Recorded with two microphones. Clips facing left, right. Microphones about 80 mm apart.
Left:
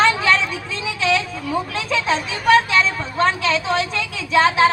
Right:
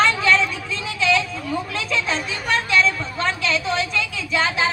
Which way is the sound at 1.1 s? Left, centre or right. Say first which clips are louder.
Left 1 dB; left.